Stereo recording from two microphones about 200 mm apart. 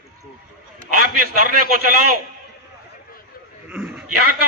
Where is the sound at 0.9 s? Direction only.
45° right (ahead or behind).